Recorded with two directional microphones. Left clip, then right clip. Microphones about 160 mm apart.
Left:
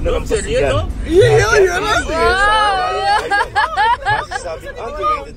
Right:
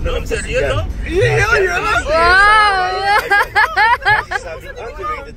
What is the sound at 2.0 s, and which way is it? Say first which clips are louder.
Speech: right 7 dB; 25° right (ahead or behind).